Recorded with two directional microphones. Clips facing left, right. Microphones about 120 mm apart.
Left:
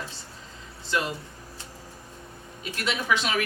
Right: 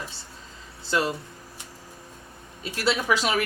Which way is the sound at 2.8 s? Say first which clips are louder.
Right 3 dB; 35° right (ahead or behind).